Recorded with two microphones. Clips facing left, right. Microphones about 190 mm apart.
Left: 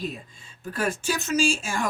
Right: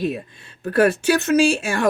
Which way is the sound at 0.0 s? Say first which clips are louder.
Right 9 dB; 65° right (ahead or behind).